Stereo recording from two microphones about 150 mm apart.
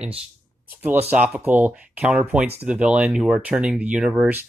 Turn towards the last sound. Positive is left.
turn(degrees=-5)  # may be behind; listen again after turning